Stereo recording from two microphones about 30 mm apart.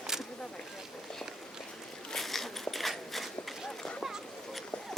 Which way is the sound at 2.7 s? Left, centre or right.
Centre.